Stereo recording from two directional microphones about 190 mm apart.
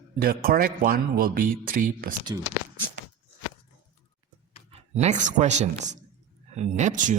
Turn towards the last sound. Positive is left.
turn(degrees=-40)  # may be behind; listen again after turning